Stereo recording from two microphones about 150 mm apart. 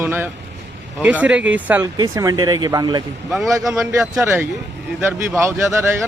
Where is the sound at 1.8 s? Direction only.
25° right (ahead or behind).